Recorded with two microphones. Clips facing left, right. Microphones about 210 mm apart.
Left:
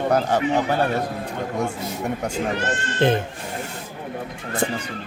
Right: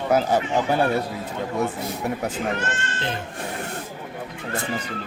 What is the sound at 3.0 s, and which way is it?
Speech, 55° left (ahead or behind).